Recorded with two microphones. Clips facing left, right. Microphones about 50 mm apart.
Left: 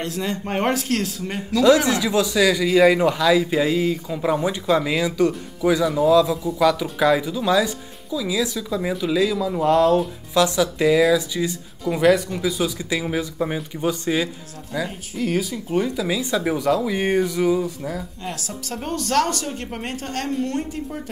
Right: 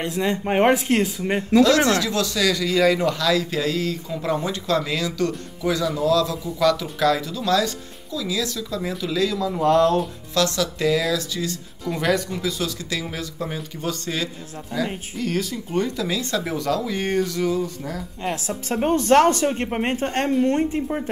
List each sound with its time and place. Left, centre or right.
0.0 s speech: centre
1.9 s speech: centre
10.3 s speech: centre
18.2 s a woman's voice: right